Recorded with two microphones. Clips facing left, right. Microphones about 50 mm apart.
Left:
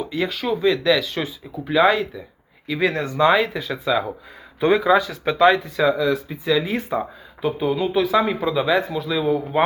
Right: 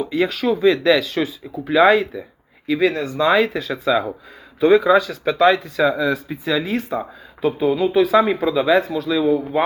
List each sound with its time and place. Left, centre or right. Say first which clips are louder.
0.0 s speech: right 4 dB; centre
2.8 s speech: even; left
3.3 s speech: right 3 dB; centre
5.9 s speech: even; centre